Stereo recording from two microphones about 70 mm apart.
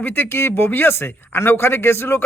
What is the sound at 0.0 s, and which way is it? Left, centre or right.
A man's voice, left.